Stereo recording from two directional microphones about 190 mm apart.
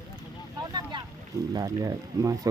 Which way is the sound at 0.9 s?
25° right (ahead or behind).